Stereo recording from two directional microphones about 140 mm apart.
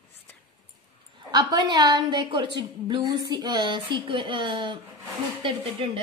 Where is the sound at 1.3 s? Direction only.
30° right (ahead or behind).